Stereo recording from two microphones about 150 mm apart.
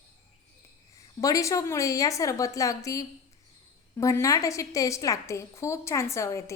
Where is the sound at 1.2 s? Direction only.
20° left (ahead or behind).